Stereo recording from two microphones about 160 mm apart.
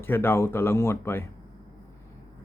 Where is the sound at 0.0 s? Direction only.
15° left (ahead or behind).